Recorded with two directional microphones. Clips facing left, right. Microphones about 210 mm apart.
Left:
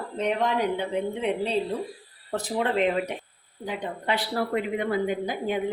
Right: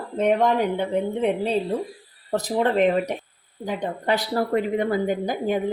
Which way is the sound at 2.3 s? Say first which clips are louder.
Right 4 dB; 40° right (ahead or behind).